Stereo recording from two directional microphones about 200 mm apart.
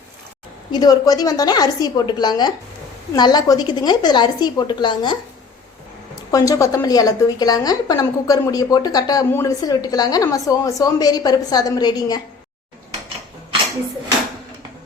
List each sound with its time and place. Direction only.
0.7 s a woman's voice: 20° left (ahead or behind)
6.3 s a woman's voice: 15° left (ahead or behind)